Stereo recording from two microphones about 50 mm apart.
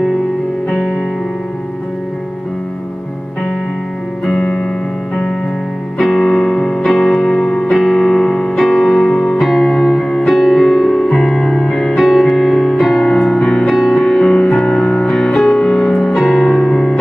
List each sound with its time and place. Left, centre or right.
4.3 s music: centre
5.9 s music: centre
13.7 s music: centre
13.9 s music: centre
16.2 s music: centre
16.7 s music: centre